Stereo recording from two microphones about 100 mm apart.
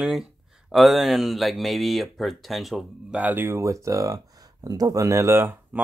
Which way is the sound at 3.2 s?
20° right (ahead or behind).